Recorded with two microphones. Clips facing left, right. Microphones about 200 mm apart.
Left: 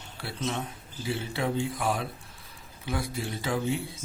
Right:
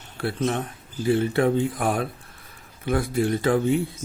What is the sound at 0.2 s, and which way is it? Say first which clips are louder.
Speech: right 8 dB; 55° right (ahead or behind).